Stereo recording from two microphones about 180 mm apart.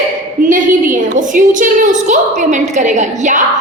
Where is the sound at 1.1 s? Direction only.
50° right (ahead or behind).